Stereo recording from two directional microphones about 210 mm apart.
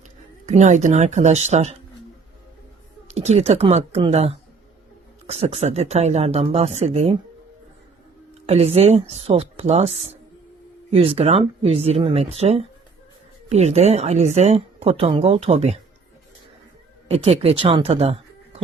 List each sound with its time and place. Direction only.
0.4 s speech: 35° right (ahead or behind)
3.2 s speech: 30° right (ahead or behind)
8.4 s speech: 30° right (ahead or behind)
17.1 s speech: 30° right (ahead or behind)